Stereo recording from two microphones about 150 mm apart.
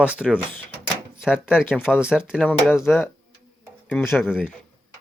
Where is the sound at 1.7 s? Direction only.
15° left (ahead or behind).